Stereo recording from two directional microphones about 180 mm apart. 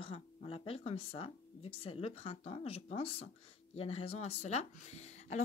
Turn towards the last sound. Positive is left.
turn(degrees=40)  # may be behind; listen again after turning